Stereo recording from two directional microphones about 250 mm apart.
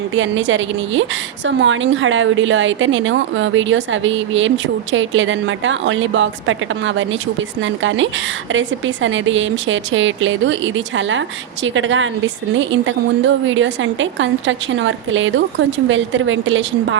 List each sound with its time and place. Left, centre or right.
0.1 s a woman's voice: right